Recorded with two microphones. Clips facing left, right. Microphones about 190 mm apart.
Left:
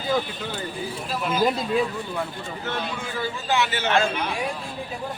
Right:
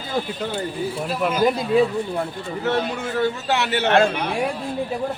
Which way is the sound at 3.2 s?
70° right (ahead or behind).